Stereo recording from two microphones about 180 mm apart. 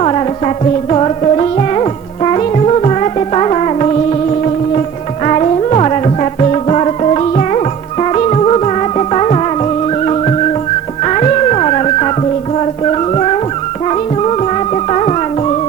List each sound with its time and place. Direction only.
0.0 s music: 35° left (ahead or behind)